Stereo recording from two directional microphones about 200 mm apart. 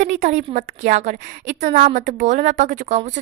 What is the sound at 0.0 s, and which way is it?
A woman's voice, 40° right (ahead or behind).